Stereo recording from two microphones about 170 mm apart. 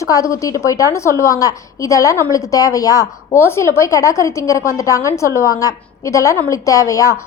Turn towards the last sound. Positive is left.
turn(degrees=20)  # may be behind; listen again after turning